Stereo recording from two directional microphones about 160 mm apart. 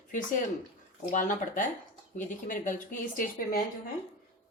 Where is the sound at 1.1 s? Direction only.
55° left (ahead or behind).